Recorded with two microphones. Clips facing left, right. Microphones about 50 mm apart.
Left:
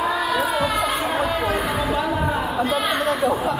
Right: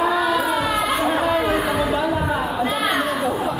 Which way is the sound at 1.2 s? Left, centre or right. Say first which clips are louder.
Right 3 dB; centre.